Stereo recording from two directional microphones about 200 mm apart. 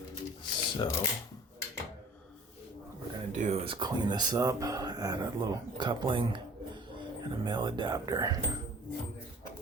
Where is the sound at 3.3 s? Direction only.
30° right (ahead or behind).